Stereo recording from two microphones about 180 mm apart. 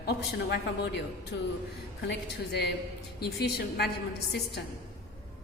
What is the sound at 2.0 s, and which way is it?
A woman's voice, 65° left (ahead or behind).